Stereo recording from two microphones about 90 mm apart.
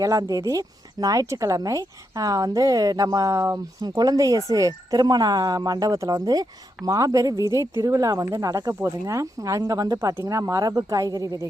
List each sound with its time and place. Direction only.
0.0 s speech: 40° right (ahead or behind)